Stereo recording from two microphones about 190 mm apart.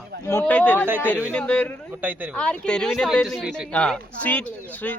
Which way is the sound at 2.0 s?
10° right (ahead or behind).